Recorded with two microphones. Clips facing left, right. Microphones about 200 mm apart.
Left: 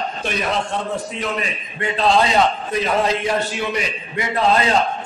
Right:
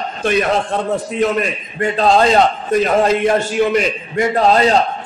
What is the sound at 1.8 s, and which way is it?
A man's voice, 45° right (ahead or behind).